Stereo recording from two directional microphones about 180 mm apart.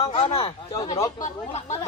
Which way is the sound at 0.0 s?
30° left (ahead or behind).